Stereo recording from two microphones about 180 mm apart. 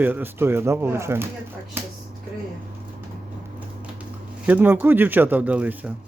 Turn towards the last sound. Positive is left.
turn(degrees=-10)  # may be behind; listen again after turning